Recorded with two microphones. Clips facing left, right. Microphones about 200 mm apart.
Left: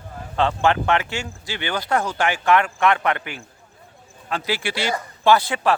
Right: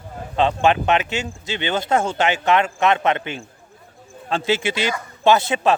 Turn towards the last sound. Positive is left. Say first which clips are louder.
# right 1 dB
turn(degrees=-20)  # may be behind; listen again after turning